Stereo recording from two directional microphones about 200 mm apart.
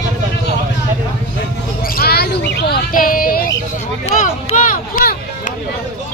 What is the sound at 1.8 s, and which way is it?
Speech, 50° left (ahead or behind).